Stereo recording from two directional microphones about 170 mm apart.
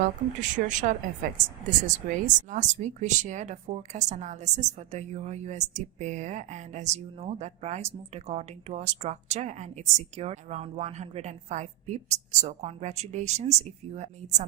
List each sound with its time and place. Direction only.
0.0 s speech: 45° right (ahead or behind)